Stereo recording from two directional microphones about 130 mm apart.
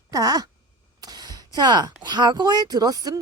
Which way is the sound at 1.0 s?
30° right (ahead or behind).